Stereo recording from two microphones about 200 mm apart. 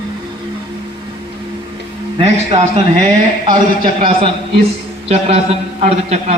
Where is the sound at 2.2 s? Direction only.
35° right (ahead or behind).